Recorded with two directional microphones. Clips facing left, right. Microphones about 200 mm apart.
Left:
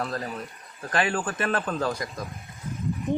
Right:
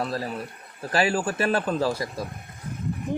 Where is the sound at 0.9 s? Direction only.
10° right (ahead or behind).